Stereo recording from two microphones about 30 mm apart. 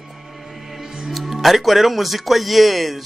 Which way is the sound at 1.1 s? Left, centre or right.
Centre.